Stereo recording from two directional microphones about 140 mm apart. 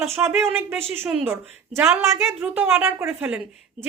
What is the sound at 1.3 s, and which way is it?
A woman's voice, 15° right (ahead or behind).